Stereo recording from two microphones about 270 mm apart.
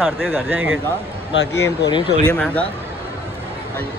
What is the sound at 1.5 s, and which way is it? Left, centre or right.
Speech, centre.